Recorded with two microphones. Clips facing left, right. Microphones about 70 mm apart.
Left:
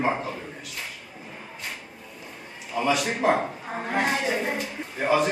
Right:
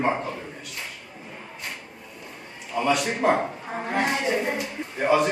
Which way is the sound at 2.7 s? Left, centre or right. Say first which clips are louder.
Right 1 dB; centre.